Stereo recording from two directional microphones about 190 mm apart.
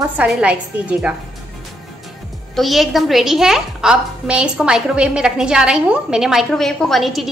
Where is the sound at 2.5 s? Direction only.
Centre (ahead or behind).